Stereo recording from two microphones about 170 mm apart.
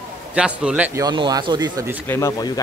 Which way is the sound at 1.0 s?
25° right (ahead or behind).